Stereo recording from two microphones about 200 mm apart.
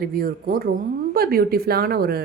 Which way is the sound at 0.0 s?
45° right (ahead or behind).